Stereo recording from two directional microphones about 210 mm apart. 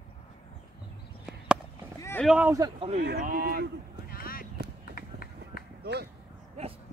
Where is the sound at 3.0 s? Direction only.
45° right (ahead or behind).